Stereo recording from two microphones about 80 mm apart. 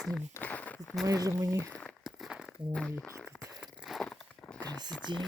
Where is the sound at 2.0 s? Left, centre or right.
Centre.